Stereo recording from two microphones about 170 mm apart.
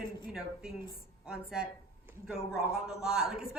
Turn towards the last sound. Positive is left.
turn(degrees=-5)  # may be behind; listen again after turning